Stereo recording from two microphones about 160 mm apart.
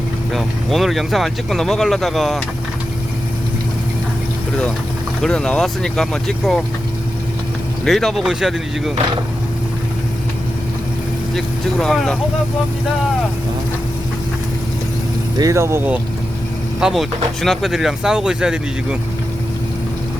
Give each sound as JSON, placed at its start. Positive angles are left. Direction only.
{"t": 0.3, "sound": "speech", "side_deg": 0}
{"t": 5.2, "sound": "speech", "side_deg": 5}
{"t": 7.9, "sound": "speech", "side_deg": 0}
{"t": 11.3, "sound": "speech", "side_deg": 0}
{"t": 15.4, "sound": "speech", "side_deg": -20}
{"t": 16.8, "sound": "speech", "side_deg": 0}